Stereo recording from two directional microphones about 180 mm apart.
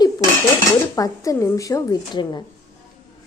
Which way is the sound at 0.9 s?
20° left (ahead or behind).